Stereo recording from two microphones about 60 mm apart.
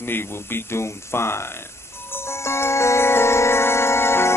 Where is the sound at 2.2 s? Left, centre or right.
Left.